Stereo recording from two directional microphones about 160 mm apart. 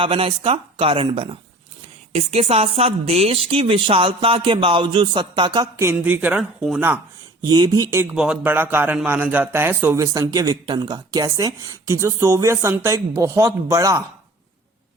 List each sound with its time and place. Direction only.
0.0 s speech: 35° right (ahead or behind); by 7.0 s 10° right (ahead or behind)
7.4 s speech: 25° right (ahead or behind)
8.1 s a man's voice: 5° right (ahead or behind)